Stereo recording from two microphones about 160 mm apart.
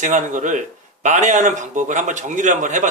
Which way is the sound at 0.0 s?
50° right (ahead or behind).